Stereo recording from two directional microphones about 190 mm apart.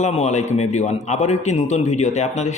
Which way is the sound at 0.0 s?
35° left (ahead or behind).